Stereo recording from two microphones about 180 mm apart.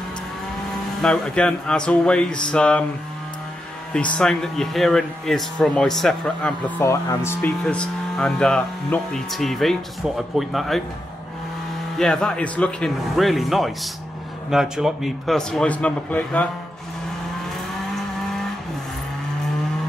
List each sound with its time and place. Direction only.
1.0 s speech: 5° left (ahead or behind)
3.9 s speech: 5° left (ahead or behind)
6.8 s speech: 15° left (ahead or behind); by 10.8 s centre (ahead or behind)
12.0 s speech: 5° left (ahead or behind)